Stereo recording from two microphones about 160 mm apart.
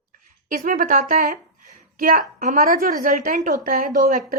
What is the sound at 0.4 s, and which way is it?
A woman's voice, 60° right (ahead or behind).